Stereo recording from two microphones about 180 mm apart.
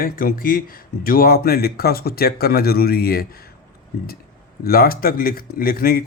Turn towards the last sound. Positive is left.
turn(degrees=55)  # may be behind; listen again after turning